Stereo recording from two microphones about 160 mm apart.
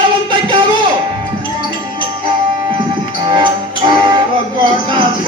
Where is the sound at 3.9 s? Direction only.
30° right (ahead or behind).